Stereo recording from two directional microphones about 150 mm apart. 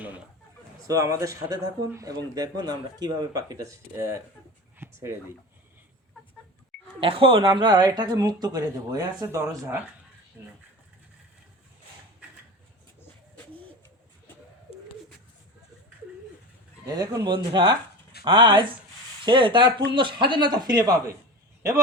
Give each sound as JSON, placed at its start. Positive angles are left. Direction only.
{"t": 0.9, "sound": "speech", "side_deg": -20}
{"t": 4.8, "sound": "a sound", "side_deg": -15}
{"t": 7.0, "sound": "speech", "side_deg": -35}
{"t": 16.8, "sound": "speech", "side_deg": -25}